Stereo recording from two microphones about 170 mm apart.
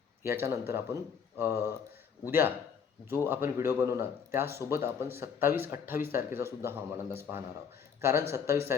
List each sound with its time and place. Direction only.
0.2 s speech: 15° right (ahead or behind)